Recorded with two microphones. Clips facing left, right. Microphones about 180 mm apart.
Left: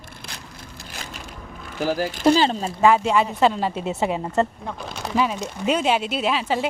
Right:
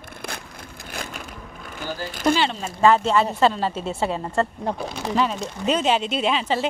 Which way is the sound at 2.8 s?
10° left (ahead or behind).